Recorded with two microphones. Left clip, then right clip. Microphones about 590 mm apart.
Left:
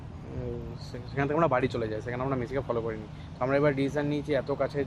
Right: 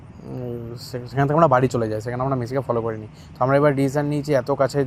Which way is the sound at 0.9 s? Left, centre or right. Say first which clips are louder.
Right 8 dB; right.